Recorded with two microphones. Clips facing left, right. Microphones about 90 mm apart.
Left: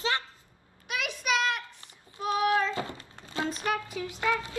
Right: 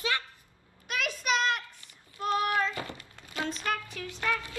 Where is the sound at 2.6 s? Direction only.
25° left (ahead or behind).